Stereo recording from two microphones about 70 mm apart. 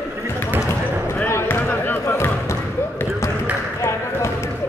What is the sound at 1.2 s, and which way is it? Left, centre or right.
Basketball bounce, left.